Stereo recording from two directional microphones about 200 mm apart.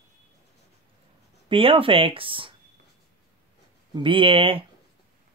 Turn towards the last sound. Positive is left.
turn(degrees=-25)  # may be behind; listen again after turning